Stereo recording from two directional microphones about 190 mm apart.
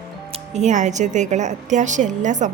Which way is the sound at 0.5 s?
40° right (ahead or behind).